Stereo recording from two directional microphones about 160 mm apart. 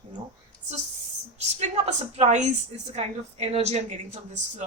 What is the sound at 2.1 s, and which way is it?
A woman's voice, 45° right (ahead or behind).